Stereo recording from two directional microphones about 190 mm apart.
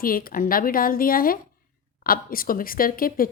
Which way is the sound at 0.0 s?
50° left (ahead or behind).